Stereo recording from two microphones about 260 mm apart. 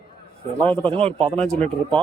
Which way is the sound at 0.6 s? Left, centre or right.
Centre.